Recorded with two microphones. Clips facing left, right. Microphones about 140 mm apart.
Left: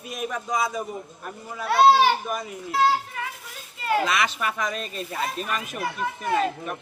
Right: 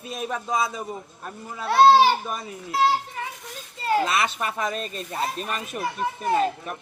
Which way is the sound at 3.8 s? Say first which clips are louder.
Right 1 dB; 30° right (ahead or behind).